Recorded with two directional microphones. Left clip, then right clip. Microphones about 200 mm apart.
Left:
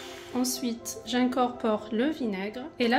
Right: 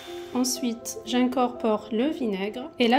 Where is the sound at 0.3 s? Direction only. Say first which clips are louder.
Right 3 dB; 20° right (ahead or behind).